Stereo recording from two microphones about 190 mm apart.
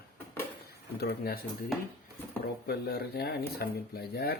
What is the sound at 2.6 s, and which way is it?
Speech, 55° left (ahead or behind).